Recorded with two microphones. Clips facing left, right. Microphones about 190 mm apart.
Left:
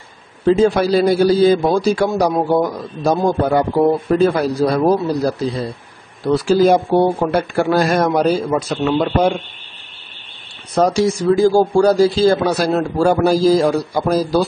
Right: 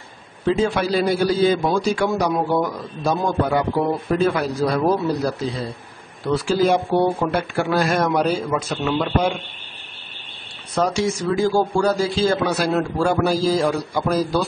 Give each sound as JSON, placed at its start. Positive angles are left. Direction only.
{"t": 0.5, "sound": "speech", "side_deg": 40}
{"t": 10.7, "sound": "speech", "side_deg": 40}